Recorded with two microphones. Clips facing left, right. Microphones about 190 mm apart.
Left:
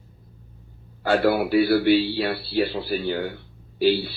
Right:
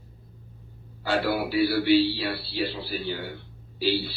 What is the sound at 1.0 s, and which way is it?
A man's voice, 55° left (ahead or behind).